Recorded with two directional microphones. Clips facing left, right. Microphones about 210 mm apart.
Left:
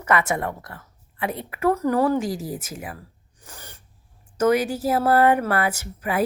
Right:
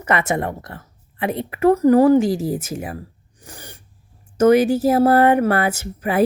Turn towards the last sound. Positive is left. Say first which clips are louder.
# right 6 dB
turn(degrees=-25)  # may be behind; listen again after turning